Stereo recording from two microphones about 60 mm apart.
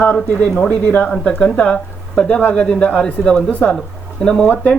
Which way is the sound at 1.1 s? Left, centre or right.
Centre.